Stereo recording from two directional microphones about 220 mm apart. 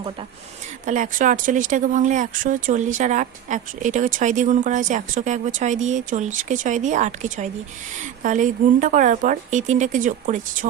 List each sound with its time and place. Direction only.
0.9 s speech: 35° right (ahead or behind)